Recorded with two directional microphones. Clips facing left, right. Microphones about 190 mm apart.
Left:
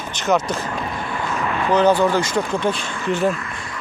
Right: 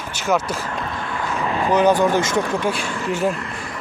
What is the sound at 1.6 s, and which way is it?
Speech, 15° right (ahead or behind).